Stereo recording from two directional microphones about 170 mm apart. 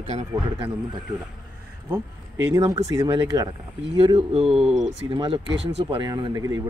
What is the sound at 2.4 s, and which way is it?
Speech, 20° right (ahead or behind).